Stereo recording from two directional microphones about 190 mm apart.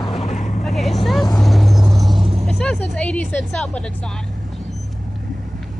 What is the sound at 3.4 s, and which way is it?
Speech, 5° left (ahead or behind).